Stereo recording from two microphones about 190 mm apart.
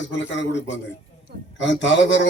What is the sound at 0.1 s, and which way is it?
A man's voice, 70° left (ahead or behind).